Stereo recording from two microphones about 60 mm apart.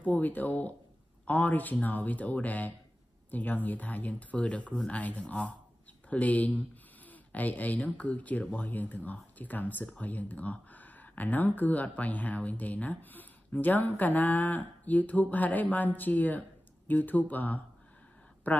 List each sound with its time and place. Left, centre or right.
0.0 s speech: left